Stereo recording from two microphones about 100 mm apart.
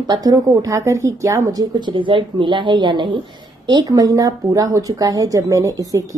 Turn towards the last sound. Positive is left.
turn(degrees=-35)  # may be behind; listen again after turning